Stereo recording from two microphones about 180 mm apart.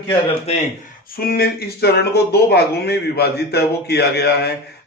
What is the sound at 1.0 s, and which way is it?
Speech, 55° left (ahead or behind).